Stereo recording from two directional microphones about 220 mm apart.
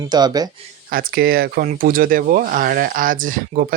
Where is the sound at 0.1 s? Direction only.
20° right (ahead or behind).